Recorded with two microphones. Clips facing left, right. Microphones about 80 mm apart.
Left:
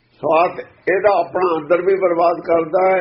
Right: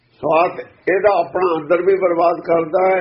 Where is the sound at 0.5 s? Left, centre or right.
Left.